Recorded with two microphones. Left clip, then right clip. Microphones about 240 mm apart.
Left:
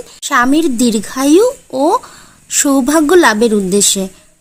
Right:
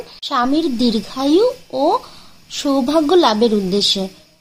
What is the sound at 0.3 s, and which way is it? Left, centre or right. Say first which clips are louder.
A woman's voice: left 6 dB; left.